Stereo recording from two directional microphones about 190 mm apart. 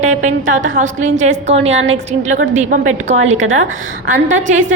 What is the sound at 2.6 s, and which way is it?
Speech, 40° right (ahead or behind).